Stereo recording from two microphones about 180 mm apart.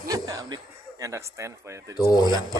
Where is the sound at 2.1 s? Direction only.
20° left (ahead or behind).